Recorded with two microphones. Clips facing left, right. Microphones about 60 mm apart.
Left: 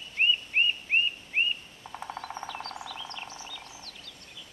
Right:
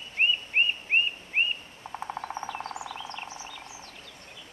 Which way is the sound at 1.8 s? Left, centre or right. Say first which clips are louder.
Right 3 dB; right.